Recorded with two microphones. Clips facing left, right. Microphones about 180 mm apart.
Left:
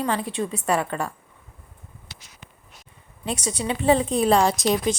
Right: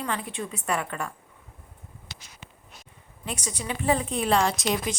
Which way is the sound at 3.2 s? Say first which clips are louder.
Left 6 dB; 25° left (ahead or behind).